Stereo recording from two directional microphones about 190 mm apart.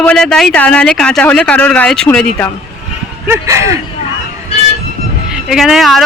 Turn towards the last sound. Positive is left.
turn(degrees=0)  # may be behind; listen again after turning